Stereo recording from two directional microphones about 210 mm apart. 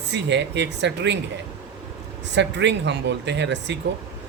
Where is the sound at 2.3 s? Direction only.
55° right (ahead or behind).